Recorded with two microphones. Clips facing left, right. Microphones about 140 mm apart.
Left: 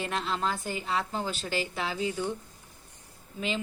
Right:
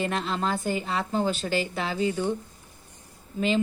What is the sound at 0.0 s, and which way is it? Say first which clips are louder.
Speech: right 3 dB; 5° left (ahead or behind).